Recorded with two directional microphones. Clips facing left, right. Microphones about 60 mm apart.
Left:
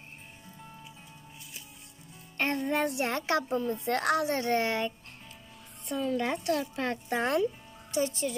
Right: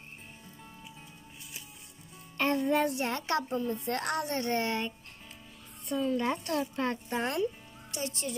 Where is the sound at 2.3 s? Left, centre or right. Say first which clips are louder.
Right 2 dB; left.